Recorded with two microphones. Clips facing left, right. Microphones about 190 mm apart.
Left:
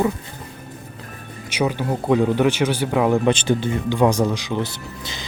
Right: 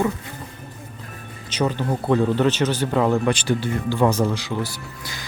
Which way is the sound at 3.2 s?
20° left (ahead or behind).